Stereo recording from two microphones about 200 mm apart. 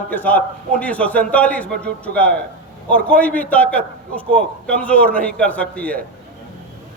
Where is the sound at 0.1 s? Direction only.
10° left (ahead or behind).